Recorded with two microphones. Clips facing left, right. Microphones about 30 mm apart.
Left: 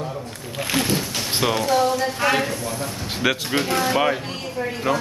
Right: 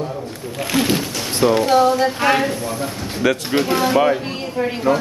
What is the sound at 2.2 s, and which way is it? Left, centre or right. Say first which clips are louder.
Speech: right 3 dB; centre.